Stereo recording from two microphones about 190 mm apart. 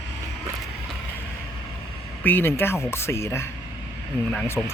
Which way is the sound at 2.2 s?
10° left (ahead or behind).